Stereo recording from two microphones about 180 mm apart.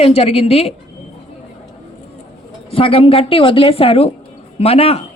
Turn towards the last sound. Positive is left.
turn(degrees=35)  # may be behind; listen again after turning